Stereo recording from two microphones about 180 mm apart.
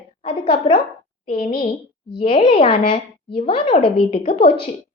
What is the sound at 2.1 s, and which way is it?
A woman's voice, 30° left (ahead or behind).